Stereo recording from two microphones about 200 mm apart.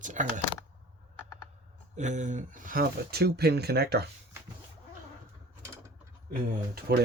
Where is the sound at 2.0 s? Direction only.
35° right (ahead or behind); by 4.0 s 55° right (ahead or behind).